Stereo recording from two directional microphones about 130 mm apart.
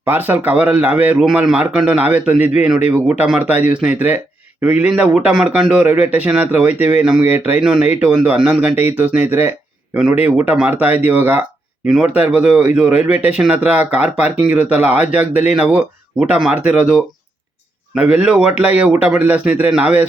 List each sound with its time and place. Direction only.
0.0 s a man's voice: 15° right (ahead or behind)
3.5 s speech: 70° left (ahead or behind)
3.8 s speech: 15° right (ahead or behind)